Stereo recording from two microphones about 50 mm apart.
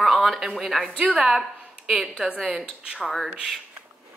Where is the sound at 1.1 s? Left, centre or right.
Centre.